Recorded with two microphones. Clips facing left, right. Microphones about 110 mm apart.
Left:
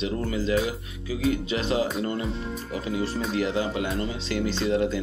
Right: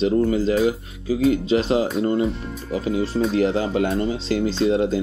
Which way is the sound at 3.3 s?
35° right (ahead or behind).